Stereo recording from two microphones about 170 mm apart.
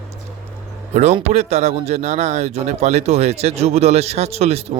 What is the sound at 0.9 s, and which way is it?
Speech, 40° right (ahead or behind).